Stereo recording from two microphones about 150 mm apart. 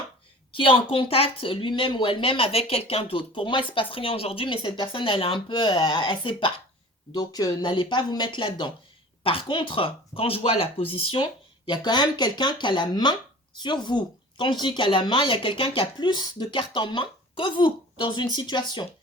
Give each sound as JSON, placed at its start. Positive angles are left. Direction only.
{"t": 0.5, "sound": "speech", "side_deg": 35}